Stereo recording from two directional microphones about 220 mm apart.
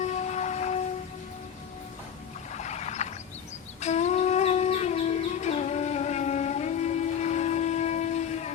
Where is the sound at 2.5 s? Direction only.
30° left (ahead or behind).